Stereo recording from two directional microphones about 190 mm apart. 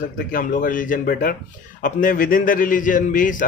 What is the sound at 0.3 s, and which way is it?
Speech, 45° left (ahead or behind).